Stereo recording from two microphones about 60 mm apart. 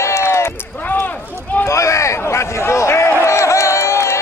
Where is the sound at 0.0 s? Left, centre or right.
Left.